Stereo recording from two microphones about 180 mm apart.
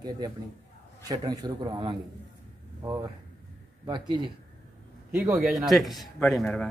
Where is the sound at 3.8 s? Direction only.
25° right (ahead or behind).